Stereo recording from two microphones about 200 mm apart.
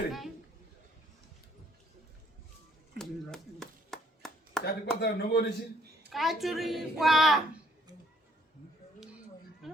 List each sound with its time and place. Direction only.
3.0 s chopping: centre (ahead or behind)
4.6 s speech: 55° left (ahead or behind)
6.1 s a woman's voice: centre (ahead or behind)
9.6 s a sound: centre (ahead or behind)